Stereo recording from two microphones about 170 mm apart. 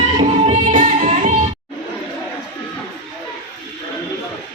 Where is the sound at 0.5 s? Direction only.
45° right (ahead or behind).